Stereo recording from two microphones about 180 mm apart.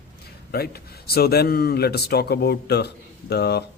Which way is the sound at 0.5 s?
60° left (ahead or behind).